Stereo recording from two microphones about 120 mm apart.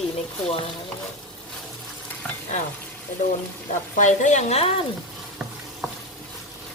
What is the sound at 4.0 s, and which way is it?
Speech, 85° left.